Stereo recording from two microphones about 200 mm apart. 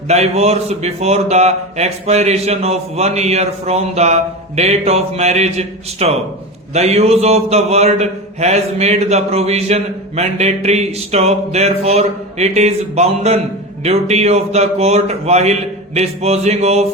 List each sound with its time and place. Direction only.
0.1 s a man's voice: 30° right (ahead or behind)